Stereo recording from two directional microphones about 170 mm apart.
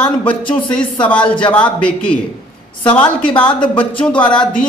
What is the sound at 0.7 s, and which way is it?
Speech, 5° left (ahead or behind).